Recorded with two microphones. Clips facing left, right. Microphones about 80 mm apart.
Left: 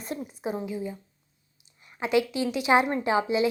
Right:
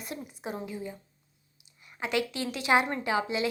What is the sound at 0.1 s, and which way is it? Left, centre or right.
Speech, left.